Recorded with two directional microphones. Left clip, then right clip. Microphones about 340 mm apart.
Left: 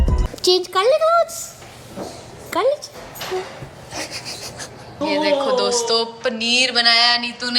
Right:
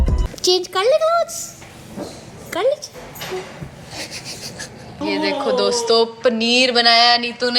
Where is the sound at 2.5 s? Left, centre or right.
Centre.